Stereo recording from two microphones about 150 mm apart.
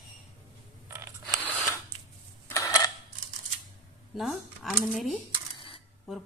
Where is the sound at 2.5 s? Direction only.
20° left (ahead or behind).